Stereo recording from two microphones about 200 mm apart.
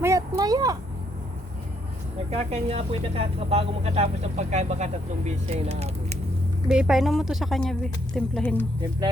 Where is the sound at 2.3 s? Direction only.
30° right (ahead or behind).